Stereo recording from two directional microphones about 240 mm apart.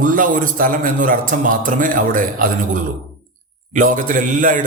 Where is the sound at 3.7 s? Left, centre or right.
Right.